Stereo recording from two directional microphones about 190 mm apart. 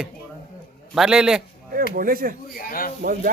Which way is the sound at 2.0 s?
50° right (ahead or behind).